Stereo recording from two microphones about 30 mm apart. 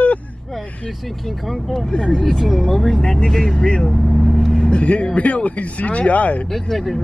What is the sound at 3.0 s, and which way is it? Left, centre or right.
Speech, left.